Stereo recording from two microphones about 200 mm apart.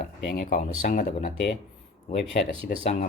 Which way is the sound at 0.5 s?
40° left (ahead or behind).